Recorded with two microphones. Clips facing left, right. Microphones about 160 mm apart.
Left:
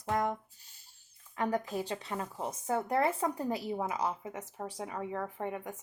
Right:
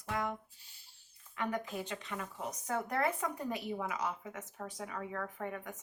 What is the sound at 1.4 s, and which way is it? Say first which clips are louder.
Speech: left 5 dB; 35° left (ahead or behind).